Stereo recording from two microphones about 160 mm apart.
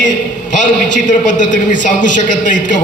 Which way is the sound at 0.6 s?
50° left (ahead or behind).